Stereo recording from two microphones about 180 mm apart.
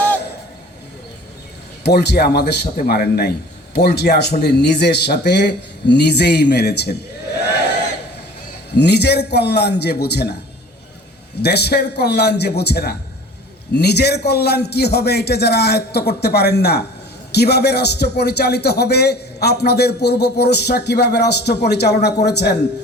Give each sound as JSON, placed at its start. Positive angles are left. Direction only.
{"t": 1.8, "sound": "a man's voice", "side_deg": 65}
{"t": 8.7, "sound": "a man's voice", "side_deg": 65}
{"t": 11.4, "sound": "a man's voice", "side_deg": 65}